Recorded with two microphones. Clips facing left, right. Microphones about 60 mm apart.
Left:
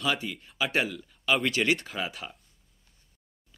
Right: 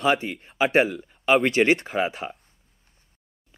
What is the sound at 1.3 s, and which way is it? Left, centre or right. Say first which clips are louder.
Speech: right 7 dB; right.